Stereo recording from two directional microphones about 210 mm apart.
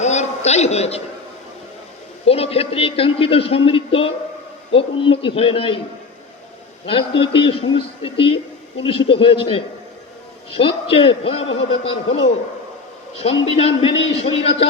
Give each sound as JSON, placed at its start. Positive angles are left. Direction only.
{"t": 0.0, "sound": "a sound", "side_deg": 35}
{"t": 2.2, "sound": "a man's voice", "side_deg": 30}
{"t": 6.8, "sound": "a man's voice", "side_deg": 25}
{"t": 13.1, "sound": "a man's voice", "side_deg": 30}